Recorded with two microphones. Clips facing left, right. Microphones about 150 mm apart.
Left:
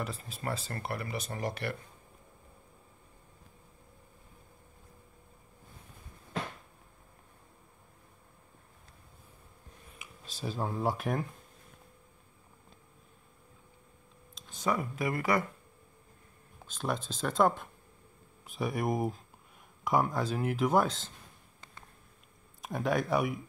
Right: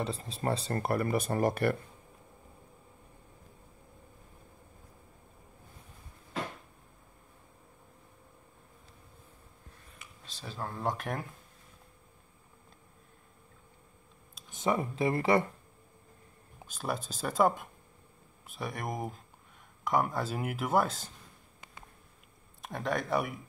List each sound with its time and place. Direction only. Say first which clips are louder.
0.0 s speech: right 4 dB; 30° right (ahead or behind)
0.8 s speech: right 8 dB; 50° right (ahead or behind)
9.9 s speech: left 6 dB; 10° left (ahead or behind)
14.6 s speech: right 2 dB; 25° right (ahead or behind)
16.6 s speech: left 1 dB; 10° right (ahead or behind)
18.5 s speech: left 5 dB; centre (ahead or behind)
22.6 s speech: left 3 dB; 5° left (ahead or behind)